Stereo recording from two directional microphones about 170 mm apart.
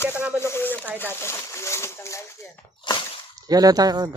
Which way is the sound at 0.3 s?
15° left (ahead or behind).